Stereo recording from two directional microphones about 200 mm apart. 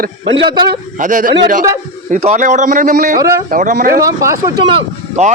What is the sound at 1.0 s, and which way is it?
A man's voice, 40° right (ahead or behind).